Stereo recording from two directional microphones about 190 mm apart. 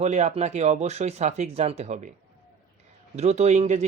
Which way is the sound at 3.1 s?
35° right (ahead or behind).